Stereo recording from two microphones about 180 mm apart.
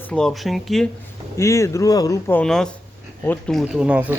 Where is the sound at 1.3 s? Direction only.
15° left (ahead or behind).